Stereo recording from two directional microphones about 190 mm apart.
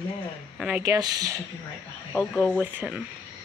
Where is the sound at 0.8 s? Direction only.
15° right (ahead or behind).